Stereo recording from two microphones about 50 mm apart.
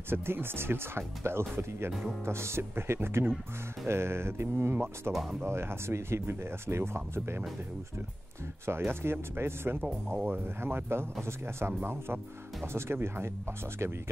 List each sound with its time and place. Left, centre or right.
0.1 s speech: right
8.6 s speech: right